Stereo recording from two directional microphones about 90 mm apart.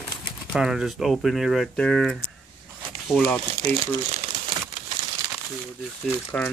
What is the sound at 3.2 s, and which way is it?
Speech, 20° left (ahead or behind).